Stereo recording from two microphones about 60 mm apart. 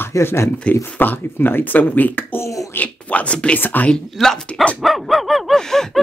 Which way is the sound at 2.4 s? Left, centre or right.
Left.